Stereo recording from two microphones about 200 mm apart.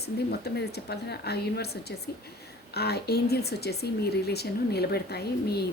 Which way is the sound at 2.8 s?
55° left (ahead or behind).